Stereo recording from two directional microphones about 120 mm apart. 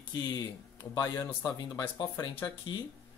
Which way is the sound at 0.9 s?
30° left (ahead or behind).